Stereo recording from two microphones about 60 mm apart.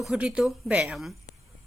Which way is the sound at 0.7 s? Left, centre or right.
Centre.